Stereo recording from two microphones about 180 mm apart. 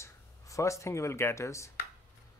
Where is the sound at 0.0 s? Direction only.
15° left (ahead or behind).